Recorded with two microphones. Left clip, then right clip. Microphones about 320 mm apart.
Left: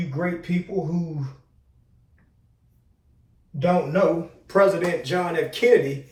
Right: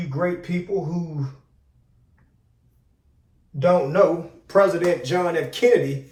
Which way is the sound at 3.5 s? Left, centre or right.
Centre.